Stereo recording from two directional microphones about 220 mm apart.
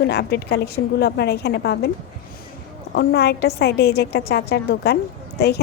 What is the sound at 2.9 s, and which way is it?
A woman's voice, 45° left (ahead or behind).